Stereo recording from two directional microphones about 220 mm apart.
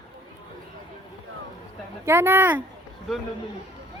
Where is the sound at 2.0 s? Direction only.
10° right (ahead or behind).